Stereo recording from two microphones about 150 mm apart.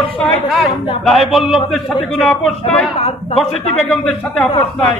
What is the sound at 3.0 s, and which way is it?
Speech, 45° left (ahead or behind).